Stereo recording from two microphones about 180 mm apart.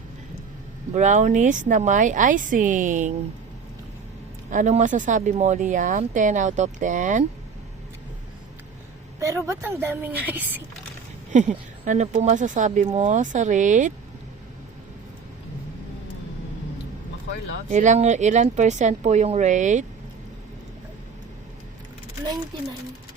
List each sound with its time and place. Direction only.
0.9 s speech: 45° right (ahead or behind)
4.5 s speech: 45° right (ahead or behind)
9.2 s a woman's voice: 15° right (ahead or behind)
11.3 s speech: 45° right (ahead or behind)
17.7 s speech: 45° right (ahead or behind)